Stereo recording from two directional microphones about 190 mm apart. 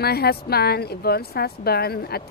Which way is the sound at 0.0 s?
55° left (ahead or behind).